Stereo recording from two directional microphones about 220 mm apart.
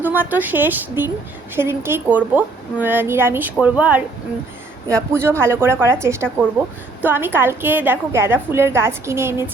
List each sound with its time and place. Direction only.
0.0 s a woman's voice: 10° right (ahead or behind)